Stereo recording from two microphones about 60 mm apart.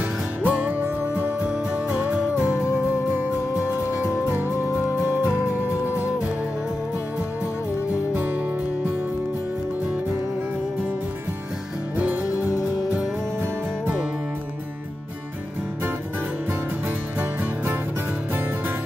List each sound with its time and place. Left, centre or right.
0.4 s music: right
3.2 s music: right